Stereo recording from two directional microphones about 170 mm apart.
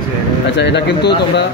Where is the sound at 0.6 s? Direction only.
90° left.